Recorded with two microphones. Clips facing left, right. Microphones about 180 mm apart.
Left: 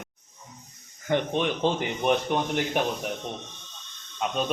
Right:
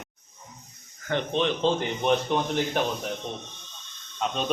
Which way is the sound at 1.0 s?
10° left (ahead or behind).